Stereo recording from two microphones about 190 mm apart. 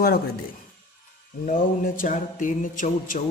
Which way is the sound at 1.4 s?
45° left (ahead or behind).